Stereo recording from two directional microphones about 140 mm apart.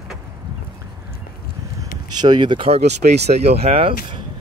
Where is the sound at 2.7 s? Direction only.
50° right (ahead or behind).